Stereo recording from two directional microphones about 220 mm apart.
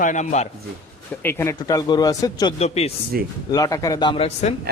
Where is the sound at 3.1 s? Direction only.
40° right (ahead or behind).